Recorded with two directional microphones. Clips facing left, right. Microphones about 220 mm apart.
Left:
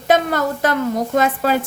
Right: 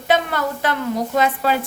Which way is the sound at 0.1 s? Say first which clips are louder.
Left 3 dB; 45° left (ahead or behind).